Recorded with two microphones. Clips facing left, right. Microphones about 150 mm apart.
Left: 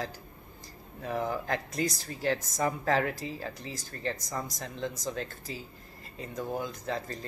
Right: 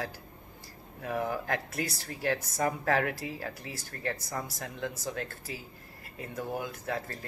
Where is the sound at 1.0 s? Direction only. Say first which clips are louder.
Even; 5° right (ahead or behind).